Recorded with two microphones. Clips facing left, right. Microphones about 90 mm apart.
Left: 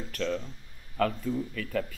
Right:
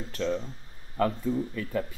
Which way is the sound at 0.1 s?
20° right (ahead or behind).